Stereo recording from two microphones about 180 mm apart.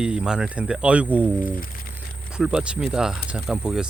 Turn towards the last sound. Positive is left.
turn(degrees=-5)  # may be behind; listen again after turning